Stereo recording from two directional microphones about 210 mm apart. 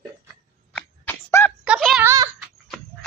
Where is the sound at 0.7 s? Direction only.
5° left (ahead or behind).